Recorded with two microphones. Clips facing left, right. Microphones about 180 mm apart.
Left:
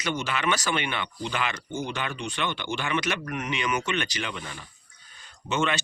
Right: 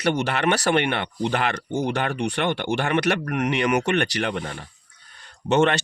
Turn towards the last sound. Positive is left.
turn(degrees=-65)  # may be behind; listen again after turning